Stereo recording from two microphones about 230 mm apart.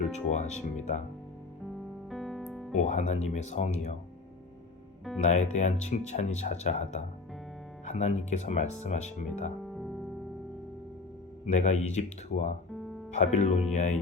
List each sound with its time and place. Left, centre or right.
0.1 s speech: left
2.0 s music: centre
2.7 s speech: left
5.2 s speech: left
9.6 s music: centre
11.5 s speech: left